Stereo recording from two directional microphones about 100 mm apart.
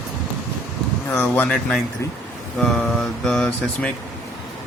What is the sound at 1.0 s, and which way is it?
Speech, 15° left (ahead or behind).